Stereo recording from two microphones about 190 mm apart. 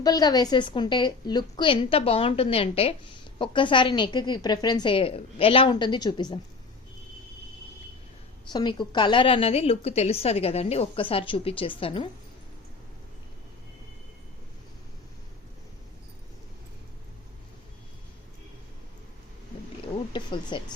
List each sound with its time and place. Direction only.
0.0 s a woman's voice: 20° left (ahead or behind)
8.4 s a woman's voice: 25° left (ahead or behind)
20.1 s a woman's voice: 25° left (ahead or behind)